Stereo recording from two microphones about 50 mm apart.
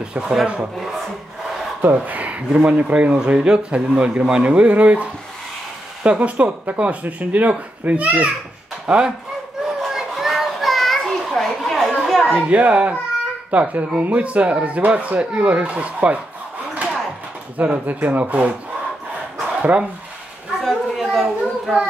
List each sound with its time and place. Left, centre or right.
0.1 s speech: centre
2.0 s speech: right; by 4.4 s centre
4.4 s speech: right
6.0 s a child's voice: right
9.8 s children playing: centre
11.2 s a sound: centre
12.4 s speech: right
17.6 s a child's voice: right
19.4 s dog: right
20.6 s children playing: centre